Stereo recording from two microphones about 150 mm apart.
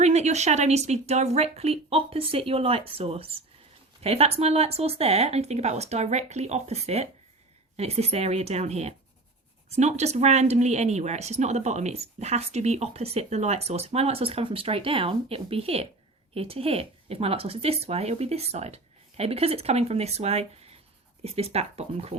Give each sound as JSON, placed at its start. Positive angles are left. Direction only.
{"t": 0.0, "sound": "speech", "side_deg": -45}